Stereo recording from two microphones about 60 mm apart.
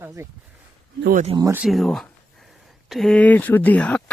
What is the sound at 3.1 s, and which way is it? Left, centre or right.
Speech, left.